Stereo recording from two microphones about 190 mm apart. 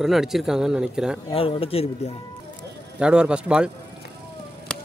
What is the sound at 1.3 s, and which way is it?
Speech, 30° left (ahead or behind).